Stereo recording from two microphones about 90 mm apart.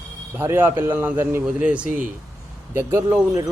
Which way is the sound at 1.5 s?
15° right (ahead or behind).